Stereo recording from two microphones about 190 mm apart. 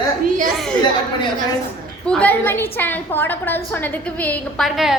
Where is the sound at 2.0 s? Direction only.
5° left (ahead or behind).